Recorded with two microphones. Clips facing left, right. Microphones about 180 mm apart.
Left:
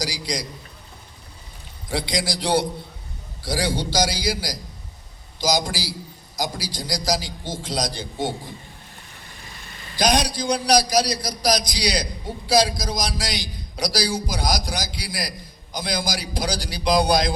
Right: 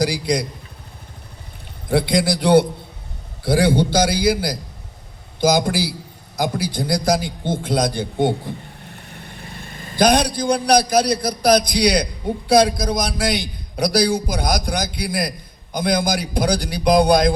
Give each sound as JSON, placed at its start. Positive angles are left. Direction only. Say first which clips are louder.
{"t": 0.0, "sound": "a man's voice", "louder": "right 9 dB", "side_deg": -55}
{"t": 1.9, "sound": "a man's voice", "louder": "right 8 dB", "side_deg": -55}